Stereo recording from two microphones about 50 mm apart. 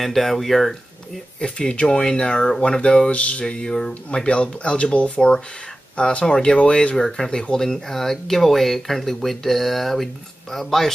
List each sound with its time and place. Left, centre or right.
0.0 s speech: centre
1.4 s speech: left; by 10.9 s centre